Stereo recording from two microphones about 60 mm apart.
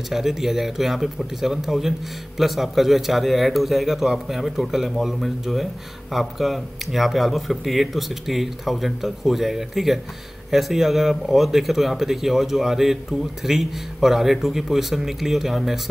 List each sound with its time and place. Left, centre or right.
0.1 s speech: centre